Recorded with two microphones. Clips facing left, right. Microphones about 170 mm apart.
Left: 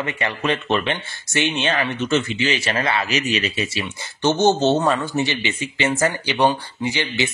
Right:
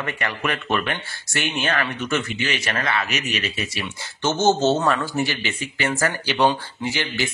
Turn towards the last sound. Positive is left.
turn(degrees=15)  # may be behind; listen again after turning